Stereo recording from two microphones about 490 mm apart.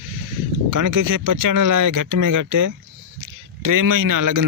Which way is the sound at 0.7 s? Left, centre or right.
Right.